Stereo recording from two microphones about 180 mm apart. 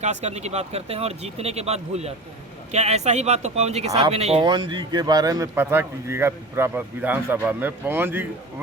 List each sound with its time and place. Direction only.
0.0 s speech: 40° right (ahead or behind); by 8.3 s 10° right (ahead or behind)